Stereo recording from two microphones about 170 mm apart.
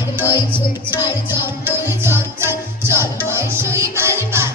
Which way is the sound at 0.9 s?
25° left (ahead or behind).